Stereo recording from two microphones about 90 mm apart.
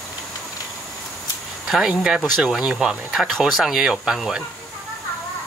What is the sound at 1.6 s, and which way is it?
Speech, 5° right (ahead or behind).